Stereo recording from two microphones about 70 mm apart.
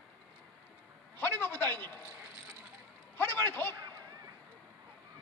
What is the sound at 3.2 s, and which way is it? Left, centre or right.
Speech, left.